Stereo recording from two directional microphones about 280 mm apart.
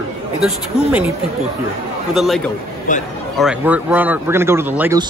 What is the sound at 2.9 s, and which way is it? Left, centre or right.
Speech, left.